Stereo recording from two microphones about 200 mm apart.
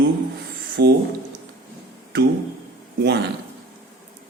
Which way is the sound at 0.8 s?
55° right (ahead or behind).